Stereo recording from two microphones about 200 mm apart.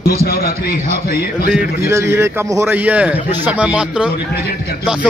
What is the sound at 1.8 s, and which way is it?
A man's voice, 10° right (ahead or behind).